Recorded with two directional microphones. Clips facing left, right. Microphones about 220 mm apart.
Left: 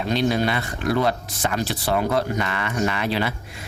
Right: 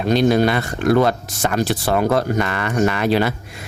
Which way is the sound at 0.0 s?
45° right (ahead or behind).